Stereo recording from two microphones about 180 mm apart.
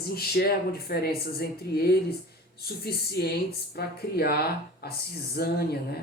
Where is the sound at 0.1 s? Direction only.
60° left (ahead or behind).